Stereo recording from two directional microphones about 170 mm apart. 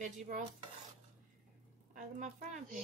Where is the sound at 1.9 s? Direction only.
45° right (ahead or behind).